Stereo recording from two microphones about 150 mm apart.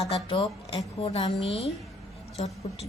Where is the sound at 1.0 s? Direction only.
40° left (ahead or behind).